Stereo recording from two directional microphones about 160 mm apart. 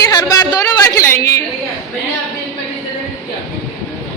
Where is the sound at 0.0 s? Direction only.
20° left (ahead or behind).